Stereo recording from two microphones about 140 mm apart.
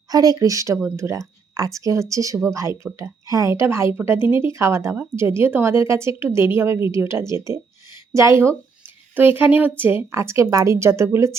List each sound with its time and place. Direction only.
0.1 s speech: 25° right (ahead or behind)